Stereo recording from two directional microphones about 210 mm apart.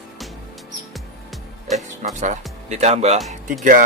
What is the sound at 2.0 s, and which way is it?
Speech, 40° right (ahead or behind).